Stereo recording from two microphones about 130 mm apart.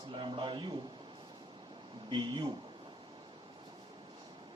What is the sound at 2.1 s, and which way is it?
Speech, 35° right (ahead or behind).